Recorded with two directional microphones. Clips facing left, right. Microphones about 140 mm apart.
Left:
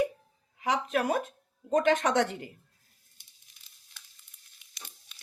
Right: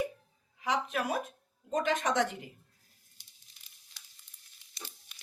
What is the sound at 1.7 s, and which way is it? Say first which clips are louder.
Speech: left 5 dB; 70° left (ahead or behind).